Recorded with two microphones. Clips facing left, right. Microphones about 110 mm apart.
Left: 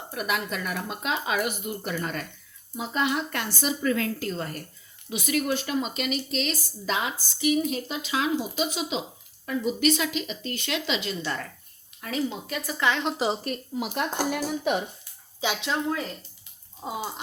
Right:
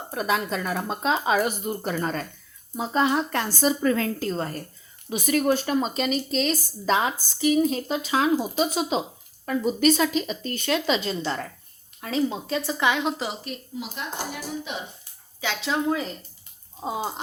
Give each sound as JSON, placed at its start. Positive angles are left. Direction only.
{"t": 0.1, "sound": "speech", "side_deg": -30}
{"t": 13.4, "sound": "speech", "side_deg": 50}
{"t": 15.4, "sound": "speech", "side_deg": 20}
{"t": 15.9, "sound": "speech", "side_deg": -15}
{"t": 16.8, "sound": "speech", "side_deg": -40}